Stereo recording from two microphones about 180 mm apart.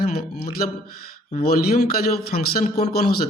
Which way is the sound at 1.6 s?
60° left (ahead or behind).